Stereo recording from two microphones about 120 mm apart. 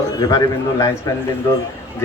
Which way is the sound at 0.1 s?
30° left (ahead or behind).